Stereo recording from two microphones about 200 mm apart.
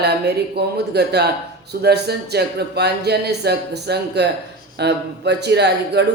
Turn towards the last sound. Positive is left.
turn(degrees=-55)  # may be behind; listen again after turning